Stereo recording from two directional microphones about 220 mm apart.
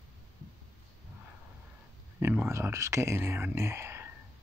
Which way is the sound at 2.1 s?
10° right (ahead or behind).